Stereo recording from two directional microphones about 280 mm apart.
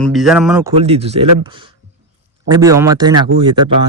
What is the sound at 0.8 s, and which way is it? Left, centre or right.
Speech, right.